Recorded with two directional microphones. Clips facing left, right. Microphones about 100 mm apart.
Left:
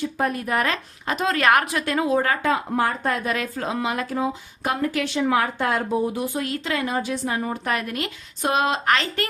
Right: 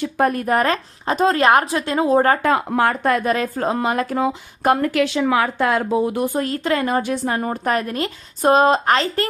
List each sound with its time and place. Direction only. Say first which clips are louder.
0.0 s a woman's voice: right 5 dB; 60° right (ahead or behind); by 2.5 s 40° right (ahead or behind)
2.5 s speech: right 4 dB; 65° right (ahead or behind)
3.2 s a woman's voice: right 6 dB; 40° right (ahead or behind)
4.1 s speech: right 4 dB; 90° right
4.6 s speech: right 7 dB; 60° right (ahead or behind); by 6.0 s 90° right
6.1 s a woman's voice: right 5 dB; 45° right (ahead or behind)